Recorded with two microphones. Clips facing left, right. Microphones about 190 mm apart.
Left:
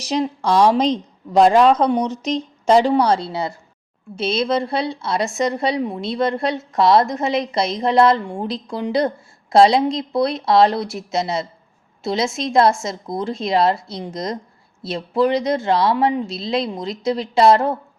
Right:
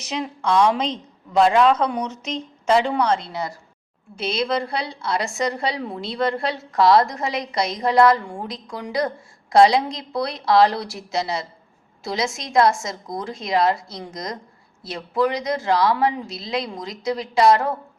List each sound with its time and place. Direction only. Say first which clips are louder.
0.0 s a woman's voice: left 5 dB; 35° left (ahead or behind)